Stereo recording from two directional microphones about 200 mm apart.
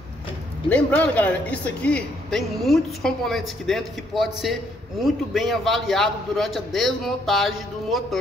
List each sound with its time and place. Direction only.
0.7 s a man's voice: 10° left (ahead or behind)